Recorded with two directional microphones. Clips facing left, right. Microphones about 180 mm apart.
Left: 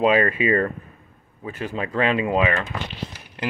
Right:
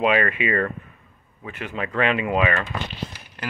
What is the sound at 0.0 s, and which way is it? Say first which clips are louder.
Speech: left 2 dB; 30° left (ahead or behind).